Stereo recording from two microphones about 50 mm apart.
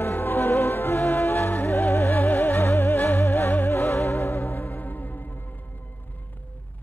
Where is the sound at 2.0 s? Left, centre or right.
Left.